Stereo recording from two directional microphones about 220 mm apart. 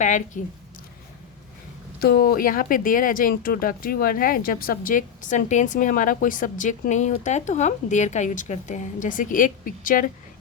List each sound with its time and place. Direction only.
0.4 s speech: 35° left (ahead or behind)
2.0 s speech: 45° left (ahead or behind)